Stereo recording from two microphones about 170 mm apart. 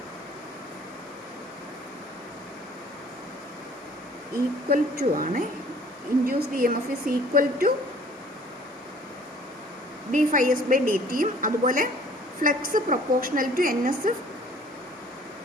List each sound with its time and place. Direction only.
4.7 s a woman's voice: 55° right (ahead or behind)
10.1 s a woman's voice: 50° right (ahead or behind)